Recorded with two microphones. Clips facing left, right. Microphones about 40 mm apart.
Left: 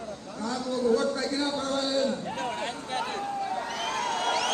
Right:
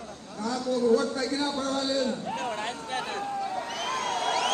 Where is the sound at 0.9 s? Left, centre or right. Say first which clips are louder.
Left 1 dB; left.